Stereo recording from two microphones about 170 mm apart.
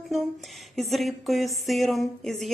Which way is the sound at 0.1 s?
Centre (ahead or behind).